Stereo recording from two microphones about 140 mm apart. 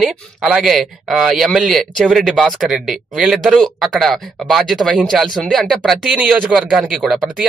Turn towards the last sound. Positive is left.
turn(degrees=0)  # may be behind; listen again after turning